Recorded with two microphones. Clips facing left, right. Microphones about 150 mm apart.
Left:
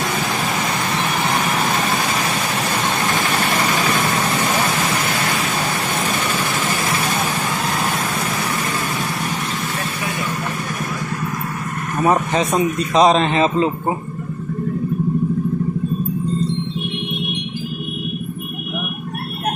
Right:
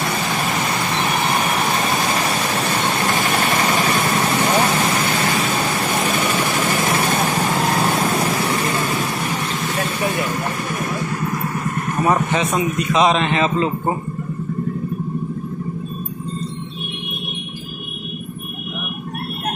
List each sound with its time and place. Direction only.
12.3 s a man's voice: 35° left (ahead or behind)